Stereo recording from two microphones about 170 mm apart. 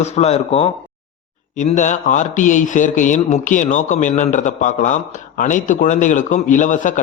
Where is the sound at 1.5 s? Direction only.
45° left (ahead or behind).